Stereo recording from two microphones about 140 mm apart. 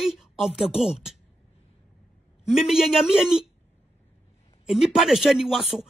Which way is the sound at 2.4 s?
5° right (ahead or behind).